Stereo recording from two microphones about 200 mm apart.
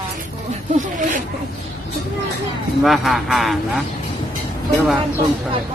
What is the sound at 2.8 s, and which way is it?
Speech, centre (ahead or behind).